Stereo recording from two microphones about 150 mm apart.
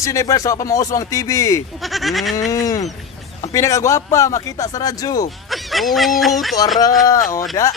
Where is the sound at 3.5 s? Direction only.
20° left (ahead or behind).